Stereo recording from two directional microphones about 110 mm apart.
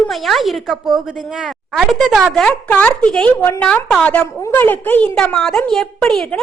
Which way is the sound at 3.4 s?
20° left (ahead or behind).